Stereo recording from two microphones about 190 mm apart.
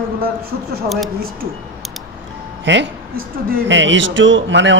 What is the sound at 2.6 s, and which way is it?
A man's voice, 70° right (ahead or behind).